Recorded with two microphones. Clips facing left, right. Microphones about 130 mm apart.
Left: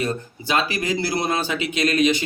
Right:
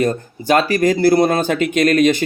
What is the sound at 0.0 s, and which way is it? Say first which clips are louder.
Speech: right 7 dB; 50° right (ahead or behind).